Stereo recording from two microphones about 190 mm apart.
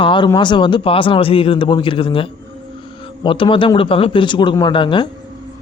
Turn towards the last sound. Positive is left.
turn(degrees=25)  # may be behind; listen again after turning